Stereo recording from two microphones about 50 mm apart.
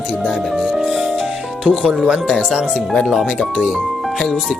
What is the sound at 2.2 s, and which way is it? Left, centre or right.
Speech, centre.